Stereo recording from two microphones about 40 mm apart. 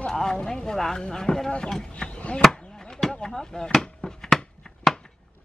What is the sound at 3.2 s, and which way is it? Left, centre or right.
Speech, centre.